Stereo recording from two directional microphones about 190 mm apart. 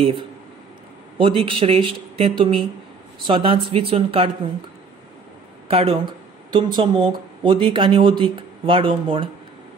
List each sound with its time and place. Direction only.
0.0 s speech: 25° right (ahead or behind)
5.7 s speech: 30° right (ahead or behind)